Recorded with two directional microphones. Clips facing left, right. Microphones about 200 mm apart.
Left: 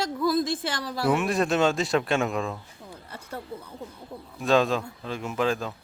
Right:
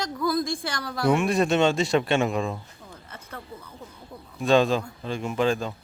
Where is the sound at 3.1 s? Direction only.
30° left (ahead or behind).